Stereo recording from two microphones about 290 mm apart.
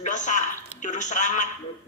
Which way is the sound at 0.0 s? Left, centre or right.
Left.